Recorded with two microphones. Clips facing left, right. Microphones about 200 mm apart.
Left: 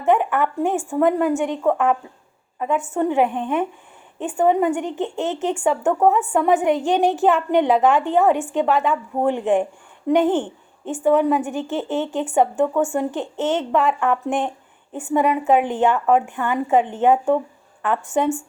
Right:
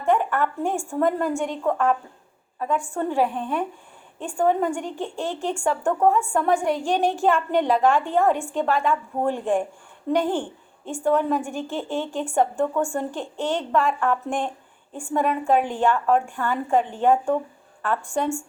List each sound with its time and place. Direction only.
0.0 s a woman's voice: 15° left (ahead or behind)